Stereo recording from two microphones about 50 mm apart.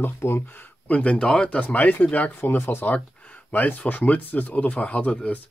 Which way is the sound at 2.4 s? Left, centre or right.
Left.